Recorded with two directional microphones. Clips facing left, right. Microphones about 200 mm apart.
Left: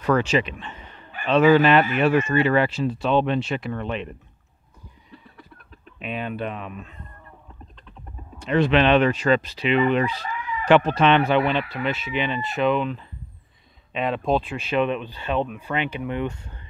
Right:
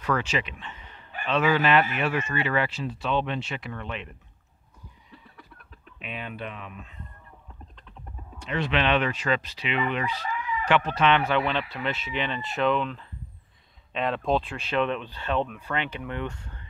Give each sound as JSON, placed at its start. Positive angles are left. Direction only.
{"t": 0.0, "sound": "speech", "side_deg": 35}
{"t": 5.9, "sound": "speech", "side_deg": 40}
{"t": 8.4, "sound": "speech", "side_deg": 40}
{"t": 11.2, "sound": "speech", "side_deg": 15}